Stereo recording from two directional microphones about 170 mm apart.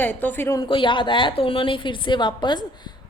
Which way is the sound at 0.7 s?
30° left (ahead or behind).